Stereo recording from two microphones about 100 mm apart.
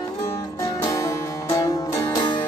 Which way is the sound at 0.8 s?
35° left (ahead or behind).